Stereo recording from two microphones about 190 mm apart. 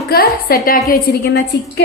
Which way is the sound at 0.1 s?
50° left (ahead or behind).